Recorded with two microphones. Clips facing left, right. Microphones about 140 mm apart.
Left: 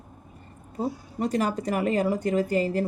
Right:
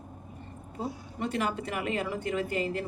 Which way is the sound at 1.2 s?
40° left (ahead or behind).